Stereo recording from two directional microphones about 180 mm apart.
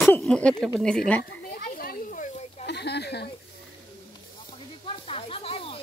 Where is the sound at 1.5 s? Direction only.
55° left (ahead or behind).